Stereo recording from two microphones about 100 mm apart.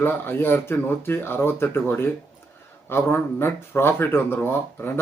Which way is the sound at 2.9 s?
20° left (ahead or behind).